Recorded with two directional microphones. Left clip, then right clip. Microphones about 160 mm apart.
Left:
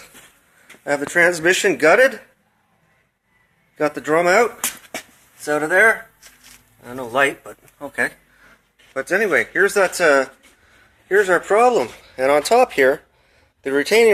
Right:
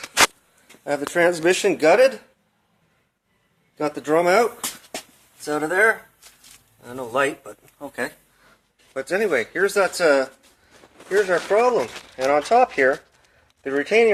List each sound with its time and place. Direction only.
0.9 s speech: centre (ahead or behind)
1.2 s speech: 15° right (ahead or behind); by 2.1 s centre (ahead or behind)
3.8 s speech: centre (ahead or behind)